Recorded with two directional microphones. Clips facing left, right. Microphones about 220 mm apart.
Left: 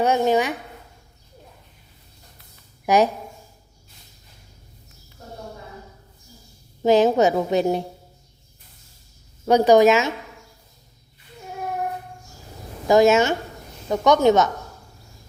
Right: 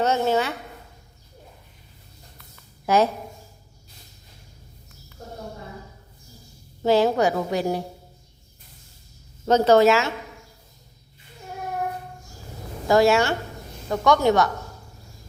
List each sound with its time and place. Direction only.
0.0 s speech: 15° left (ahead or behind)
2.8 s speech: 15° left (ahead or behind)
6.8 s a woman's voice: 20° left (ahead or behind)
9.5 s speech: 15° left (ahead or behind)
12.9 s a woman's voice: 20° left (ahead or behind)